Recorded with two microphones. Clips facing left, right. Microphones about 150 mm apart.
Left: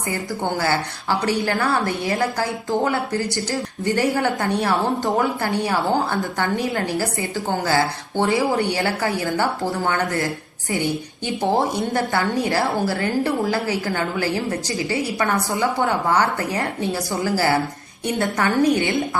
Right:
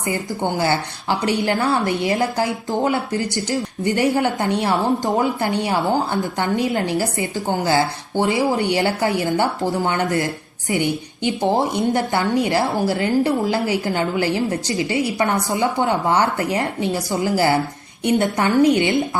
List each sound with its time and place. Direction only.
1.2 s a woman's voice: 20° right (ahead or behind)